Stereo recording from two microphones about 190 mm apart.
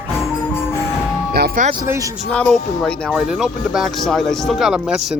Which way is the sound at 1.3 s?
55° right (ahead or behind).